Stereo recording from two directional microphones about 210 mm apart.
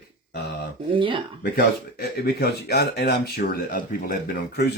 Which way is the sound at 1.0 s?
25° right (ahead or behind).